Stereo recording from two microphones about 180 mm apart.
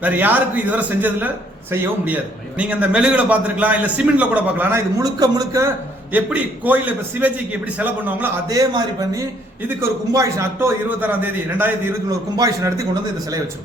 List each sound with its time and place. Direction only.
0.0 s a man's voice: 10° right (ahead or behind)
6.1 s a man's voice: 10° right (ahead or behind)